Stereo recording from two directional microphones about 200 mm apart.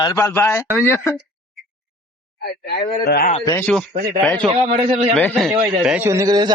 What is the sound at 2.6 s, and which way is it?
Speech, 50° left (ahead or behind).